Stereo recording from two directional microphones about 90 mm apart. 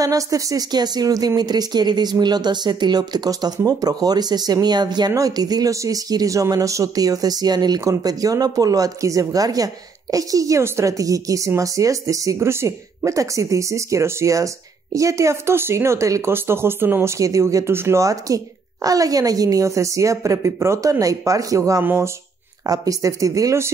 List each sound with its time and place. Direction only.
0.0 s a woman's voice: 40° right (ahead or behind)
17.2 s a woman's voice: 35° right (ahead or behind)
22.7 s a woman's voice: 40° right (ahead or behind)